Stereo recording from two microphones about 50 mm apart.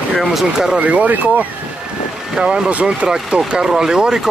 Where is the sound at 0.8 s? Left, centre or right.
Right.